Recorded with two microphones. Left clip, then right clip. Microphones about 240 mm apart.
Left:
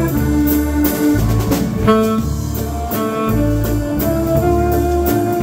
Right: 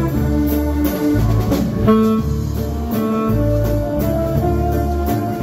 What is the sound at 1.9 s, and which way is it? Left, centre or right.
Music, left.